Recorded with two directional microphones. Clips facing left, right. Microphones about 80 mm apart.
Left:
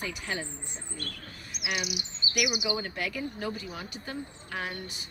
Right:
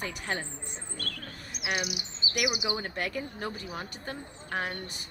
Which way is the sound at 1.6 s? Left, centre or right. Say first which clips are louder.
Right 1 dB; right.